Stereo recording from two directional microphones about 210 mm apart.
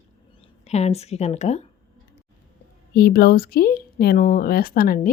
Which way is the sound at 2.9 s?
45° left (ahead or behind).